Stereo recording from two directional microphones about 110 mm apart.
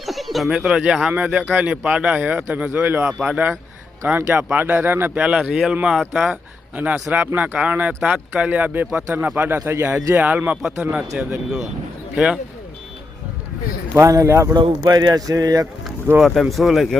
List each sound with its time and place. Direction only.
0.0 s a man's voice: centre (ahead or behind)
13.9 s a man's voice: 30° right (ahead or behind)
14.5 s speech: 40° right (ahead or behind)
16.2 s speech: centre (ahead or behind)